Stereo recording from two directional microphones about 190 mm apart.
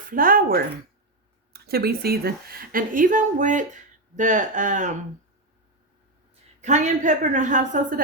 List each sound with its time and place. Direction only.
0.1 s a woman's voice: 50° right (ahead or behind)
6.6 s a woman's voice: 40° right (ahead or behind)